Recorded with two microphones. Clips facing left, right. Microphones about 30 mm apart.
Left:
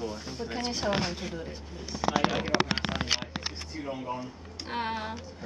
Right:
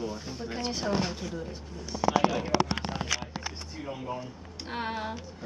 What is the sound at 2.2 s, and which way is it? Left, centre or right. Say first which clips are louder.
Speech: left 1 dB; left.